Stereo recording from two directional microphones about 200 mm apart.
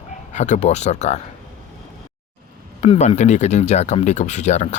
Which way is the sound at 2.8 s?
35° left (ahead or behind).